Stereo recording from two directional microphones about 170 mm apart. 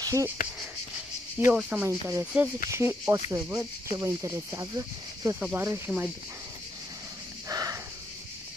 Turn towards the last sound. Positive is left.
turn(degrees=-20)  # may be behind; listen again after turning